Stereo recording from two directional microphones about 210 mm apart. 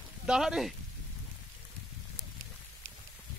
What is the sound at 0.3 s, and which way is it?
Speech, 5° right (ahead or behind).